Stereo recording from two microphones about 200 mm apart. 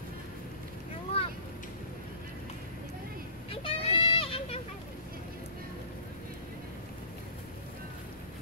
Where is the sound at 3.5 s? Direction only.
25° left (ahead or behind).